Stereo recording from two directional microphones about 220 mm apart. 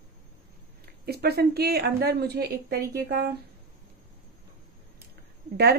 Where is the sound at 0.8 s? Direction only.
45° right (ahead or behind).